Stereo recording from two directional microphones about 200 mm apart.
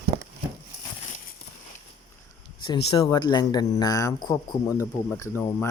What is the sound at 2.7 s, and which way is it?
Speech, 20° left (ahead or behind).